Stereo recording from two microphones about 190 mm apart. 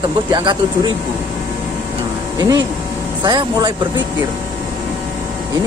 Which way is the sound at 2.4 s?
20° right (ahead or behind).